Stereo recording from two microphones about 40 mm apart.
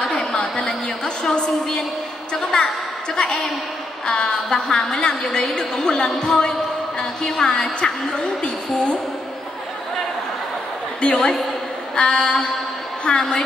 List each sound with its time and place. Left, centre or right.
0.0 s a sound: centre
2.5 s a woman's voice: centre
4.0 s a woman's voice: centre
11.0 s a woman's voice: left